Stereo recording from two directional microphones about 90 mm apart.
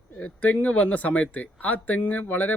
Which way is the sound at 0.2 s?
15° left (ahead or behind).